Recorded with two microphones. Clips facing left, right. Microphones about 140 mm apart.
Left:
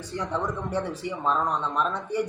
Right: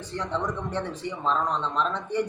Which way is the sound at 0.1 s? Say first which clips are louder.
Even; 10° left (ahead or behind).